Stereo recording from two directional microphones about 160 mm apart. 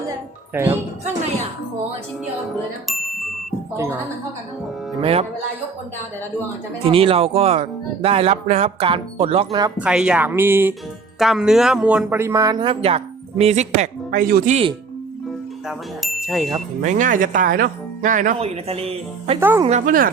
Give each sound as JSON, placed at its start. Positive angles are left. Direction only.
{"t": 0.5, "sound": "speech", "side_deg": -15}
{"t": 2.9, "sound": "music", "side_deg": 0}
{"t": 3.8, "sound": "speech", "side_deg": -15}
{"t": 4.9, "sound": "speech", "side_deg": -35}
{"t": 6.8, "sound": "speech", "side_deg": -35}
{"t": 9.7, "sound": "speech", "side_deg": -5}
{"t": 11.2, "sound": "speech", "side_deg": 0}
{"t": 12.2, "sound": "a woman's voice", "side_deg": -20}
{"t": 14.5, "sound": "speech", "side_deg": -35}
{"t": 16.0, "sound": "bicycle bell", "side_deg": 0}
{"t": 16.8, "sound": "speech", "side_deg": -50}
{"t": 18.3, "sound": "speech", "side_deg": -40}
{"t": 19.4, "sound": "speech", "side_deg": -15}
{"t": 19.6, "sound": "speech", "side_deg": -50}